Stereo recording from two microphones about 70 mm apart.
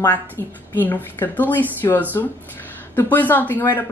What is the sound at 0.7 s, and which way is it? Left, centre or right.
Speech, left.